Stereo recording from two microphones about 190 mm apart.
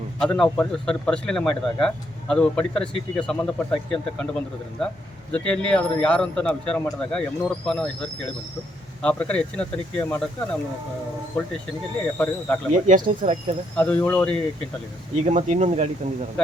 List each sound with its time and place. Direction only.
0.2 s speech: 5° left (ahead or behind)
5.3 s speech: 5° left (ahead or behind)
12.1 s speech: 10° left (ahead or behind)
12.7 s speech: 40° right (ahead or behind)
13.7 s speech: 5° left (ahead or behind)
15.1 s speech: 40° right (ahead or behind)